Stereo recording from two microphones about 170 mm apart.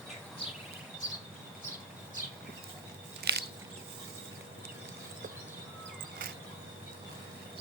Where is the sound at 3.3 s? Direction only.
70° right (ahead or behind).